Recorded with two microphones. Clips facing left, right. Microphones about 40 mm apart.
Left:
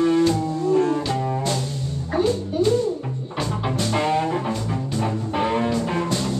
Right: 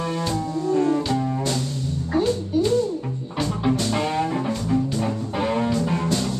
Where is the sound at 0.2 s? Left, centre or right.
Centre.